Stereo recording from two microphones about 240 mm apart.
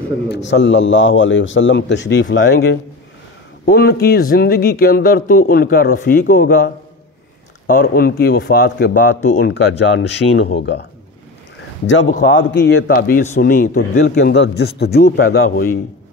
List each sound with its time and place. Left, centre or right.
0.3 s a man's voice: left
11.9 s a man's voice: left